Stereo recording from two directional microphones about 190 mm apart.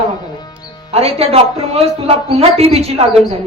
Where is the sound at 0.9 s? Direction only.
30° right (ahead or behind).